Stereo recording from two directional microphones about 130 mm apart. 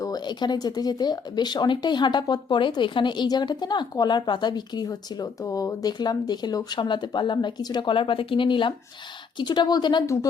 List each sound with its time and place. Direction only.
0.0 s speech: 30° left (ahead or behind)